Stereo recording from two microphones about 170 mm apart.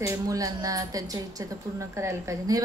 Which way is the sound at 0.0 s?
20° right (ahead or behind).